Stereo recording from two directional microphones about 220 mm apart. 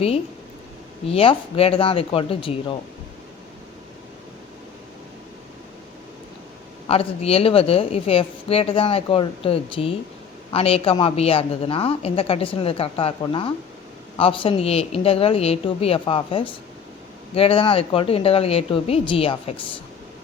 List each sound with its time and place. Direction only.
1.0 s a woman's voice: 25° left (ahead or behind)
6.8 s a woman's voice: 25° left (ahead or behind)